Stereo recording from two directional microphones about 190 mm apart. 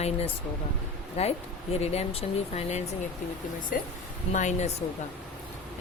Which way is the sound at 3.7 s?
45° left (ahead or behind).